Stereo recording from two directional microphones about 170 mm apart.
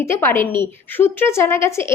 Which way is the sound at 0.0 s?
15° left (ahead or behind).